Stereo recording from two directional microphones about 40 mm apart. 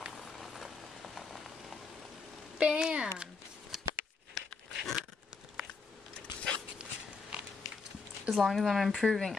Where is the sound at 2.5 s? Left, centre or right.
Right.